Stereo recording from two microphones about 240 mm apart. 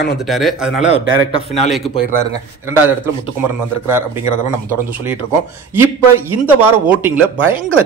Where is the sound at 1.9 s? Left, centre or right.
Left.